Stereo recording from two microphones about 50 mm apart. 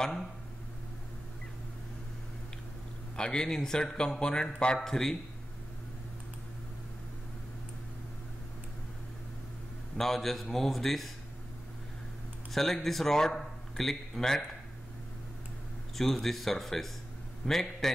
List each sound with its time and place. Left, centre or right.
3.2 s speech: centre
9.9 s a man's voice: centre
12.5 s speech: centre
16.0 s a man's voice: centre